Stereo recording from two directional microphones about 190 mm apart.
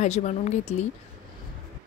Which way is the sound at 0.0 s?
40° left (ahead or behind).